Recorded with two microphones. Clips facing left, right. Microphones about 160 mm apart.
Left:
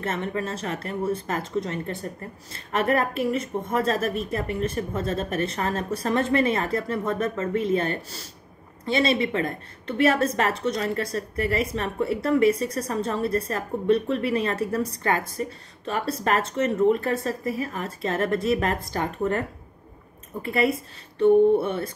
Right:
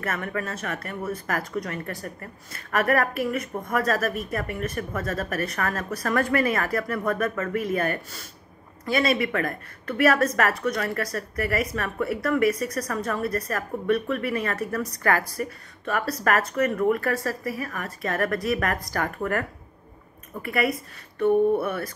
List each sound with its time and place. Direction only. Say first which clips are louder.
0.0 s a woman's voice: left 2 dB; 25° left (ahead or behind)
20.4 s a woman's voice: left 2 dB; 25° left (ahead or behind)